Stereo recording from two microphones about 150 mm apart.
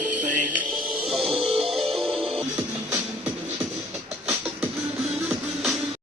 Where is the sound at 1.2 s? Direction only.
40° right (ahead or behind).